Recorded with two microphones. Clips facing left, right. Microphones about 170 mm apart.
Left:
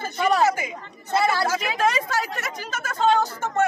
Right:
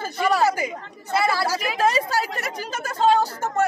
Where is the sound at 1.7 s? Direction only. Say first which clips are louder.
Right 4 dB; 35° right (ahead or behind).